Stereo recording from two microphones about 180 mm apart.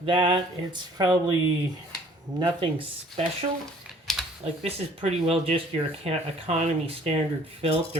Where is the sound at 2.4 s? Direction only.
30° right (ahead or behind).